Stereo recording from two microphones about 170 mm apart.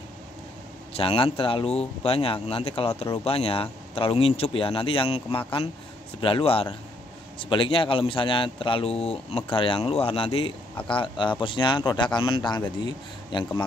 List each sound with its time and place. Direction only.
0.9 s speech: 35° left (ahead or behind)